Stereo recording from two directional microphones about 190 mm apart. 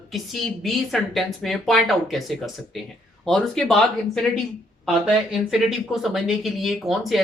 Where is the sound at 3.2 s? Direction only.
Centre (ahead or behind).